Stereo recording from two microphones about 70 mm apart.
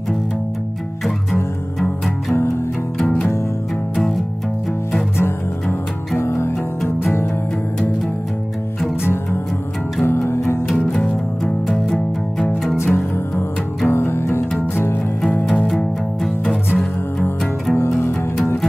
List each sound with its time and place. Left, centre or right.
3.9 s music: centre
5.1 s music: left
9.0 s music: left
11.6 s music: centre
12.7 s music: left
15.7 s music: centre
16.4 s music: left
17.7 s music: left